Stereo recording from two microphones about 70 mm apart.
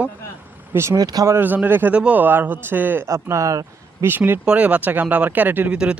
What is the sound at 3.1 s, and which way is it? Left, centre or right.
Speech, right.